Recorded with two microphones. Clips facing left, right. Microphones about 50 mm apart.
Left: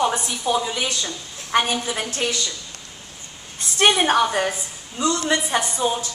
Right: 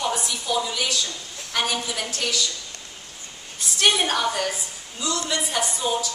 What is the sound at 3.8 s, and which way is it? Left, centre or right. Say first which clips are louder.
A woman's voice: left 4 dB; left.